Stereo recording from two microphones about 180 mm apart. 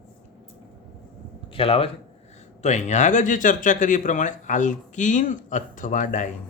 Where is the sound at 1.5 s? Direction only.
30° left (ahead or behind).